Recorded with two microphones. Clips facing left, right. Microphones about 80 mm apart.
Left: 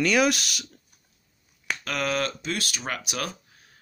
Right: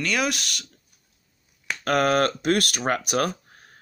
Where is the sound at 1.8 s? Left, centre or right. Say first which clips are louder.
Right 8 dB; right.